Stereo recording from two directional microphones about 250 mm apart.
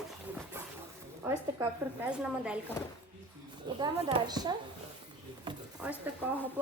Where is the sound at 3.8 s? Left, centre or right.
Centre.